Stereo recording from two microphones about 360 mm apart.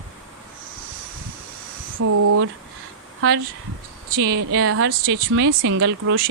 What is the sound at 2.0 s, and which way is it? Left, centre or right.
Speech, right.